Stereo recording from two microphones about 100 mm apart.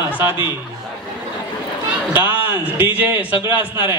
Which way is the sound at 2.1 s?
20° right (ahead or behind).